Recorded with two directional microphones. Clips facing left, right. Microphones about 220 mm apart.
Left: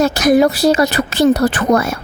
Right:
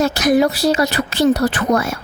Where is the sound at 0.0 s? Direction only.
45° left (ahead or behind).